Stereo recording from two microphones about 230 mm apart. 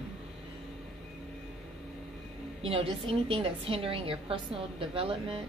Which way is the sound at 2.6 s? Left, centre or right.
Right.